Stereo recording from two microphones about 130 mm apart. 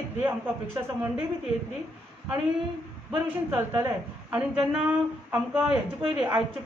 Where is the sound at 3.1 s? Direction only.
10° right (ahead or behind).